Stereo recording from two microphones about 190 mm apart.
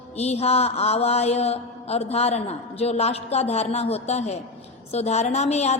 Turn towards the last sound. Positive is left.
turn(degrees=35)  # may be behind; listen again after turning